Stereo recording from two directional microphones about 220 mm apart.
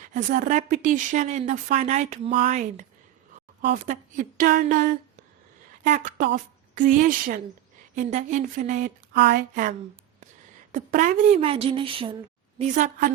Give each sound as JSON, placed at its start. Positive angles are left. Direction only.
{"t": 0.0, "sound": "a woman's voice", "side_deg": -35}
{"t": 9.1, "sound": "a woman's voice", "side_deg": -50}